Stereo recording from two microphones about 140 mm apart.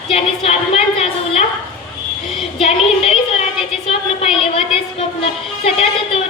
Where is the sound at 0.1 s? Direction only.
45° left (ahead or behind).